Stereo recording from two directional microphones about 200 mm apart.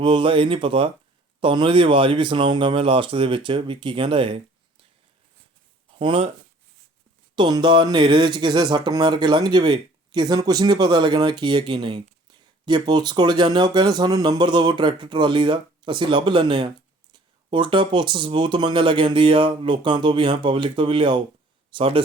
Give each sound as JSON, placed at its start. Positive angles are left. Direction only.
{"t": 0.0, "sound": "speech", "side_deg": -25}
{"t": 6.0, "sound": "speech", "side_deg": -25}
{"t": 7.3, "sound": "speech", "side_deg": -20}